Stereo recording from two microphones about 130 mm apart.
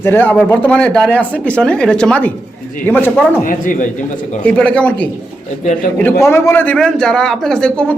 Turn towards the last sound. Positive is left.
turn(degrees=5)  # may be behind; listen again after turning